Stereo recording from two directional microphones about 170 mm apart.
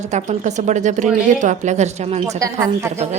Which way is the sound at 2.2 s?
20° right (ahead or behind).